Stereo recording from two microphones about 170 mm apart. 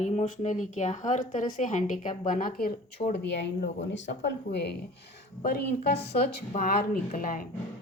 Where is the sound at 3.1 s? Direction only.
85° left.